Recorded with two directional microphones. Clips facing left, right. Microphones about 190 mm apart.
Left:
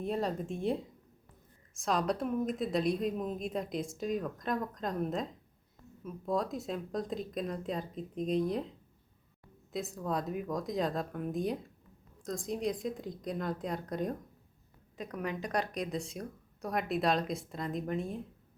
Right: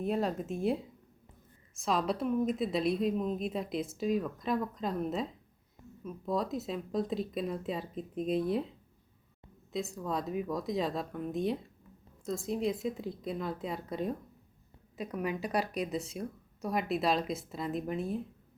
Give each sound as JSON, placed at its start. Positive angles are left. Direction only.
{"t": 0.0, "sound": "a woman's voice", "side_deg": 0}
{"t": 5.8, "sound": "a sound", "side_deg": -15}
{"t": 6.2, "sound": "a woman's voice", "side_deg": 0}
{"t": 9.7, "sound": "a woman's voice", "side_deg": 0}